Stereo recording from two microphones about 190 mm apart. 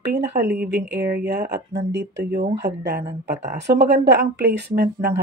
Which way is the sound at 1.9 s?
65° right (ahead or behind).